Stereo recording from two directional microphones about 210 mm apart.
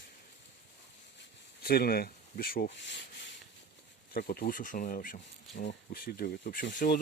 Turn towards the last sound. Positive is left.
turn(degrees=40)  # may be behind; listen again after turning